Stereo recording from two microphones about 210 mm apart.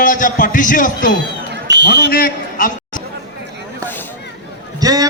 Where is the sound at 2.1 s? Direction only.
40° left (ahead or behind).